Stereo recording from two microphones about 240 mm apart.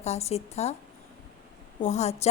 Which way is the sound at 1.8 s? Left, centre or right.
Left.